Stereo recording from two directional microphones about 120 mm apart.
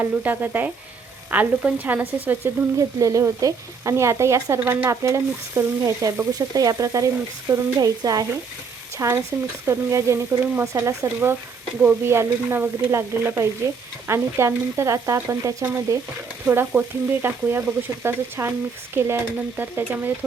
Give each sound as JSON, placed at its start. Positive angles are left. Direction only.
{"t": 0.0, "sound": "speech", "side_deg": -15}